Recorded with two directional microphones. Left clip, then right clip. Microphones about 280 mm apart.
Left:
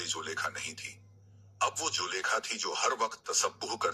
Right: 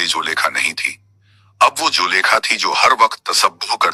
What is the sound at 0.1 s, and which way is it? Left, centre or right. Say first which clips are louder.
Speech: right 18 dB; right.